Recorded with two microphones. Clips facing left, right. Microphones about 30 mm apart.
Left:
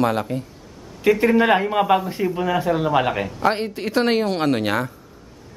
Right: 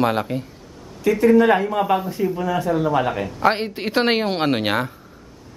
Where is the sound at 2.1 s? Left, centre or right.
Centre.